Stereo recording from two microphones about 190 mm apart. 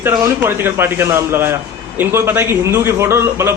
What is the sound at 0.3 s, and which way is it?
A man's voice, 10° right (ahead or behind).